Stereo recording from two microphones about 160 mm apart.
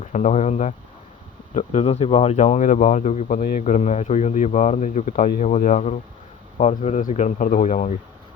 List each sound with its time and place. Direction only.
0.0 s speech: 50° left (ahead or behind)